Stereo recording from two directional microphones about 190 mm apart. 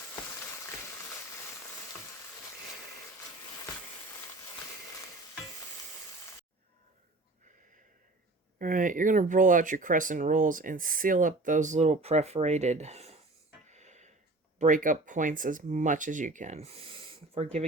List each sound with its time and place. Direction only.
8.5 s speech: 45° right (ahead or behind)
13.7 s a sound: 35° right (ahead or behind)
14.6 s speech: 45° right (ahead or behind)